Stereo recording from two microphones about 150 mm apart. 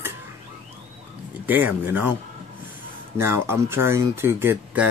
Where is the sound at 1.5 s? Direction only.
10° right (ahead or behind).